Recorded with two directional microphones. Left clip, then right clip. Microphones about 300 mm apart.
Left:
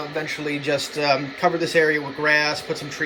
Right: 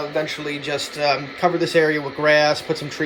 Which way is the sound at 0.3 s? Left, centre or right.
Centre.